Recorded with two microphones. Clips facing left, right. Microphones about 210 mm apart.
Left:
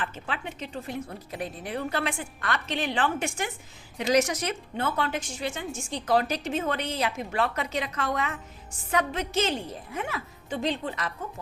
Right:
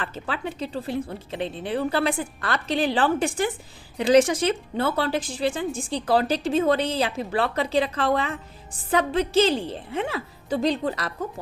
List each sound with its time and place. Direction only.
0.0 s speech: 35° right (ahead or behind)